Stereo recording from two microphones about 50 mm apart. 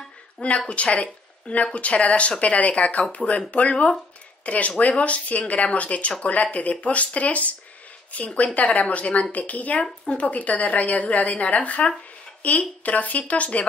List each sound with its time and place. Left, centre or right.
0.7 s speech: left